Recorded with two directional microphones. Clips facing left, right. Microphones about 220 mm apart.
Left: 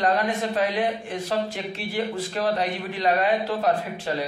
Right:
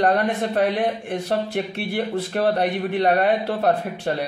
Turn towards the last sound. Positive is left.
turn(degrees=-65)  # may be behind; listen again after turning